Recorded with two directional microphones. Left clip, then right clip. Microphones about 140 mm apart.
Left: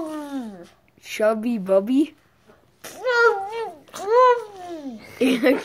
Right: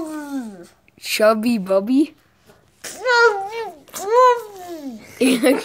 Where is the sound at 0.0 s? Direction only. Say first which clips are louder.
Right 2 dB; 5° left (ahead or behind).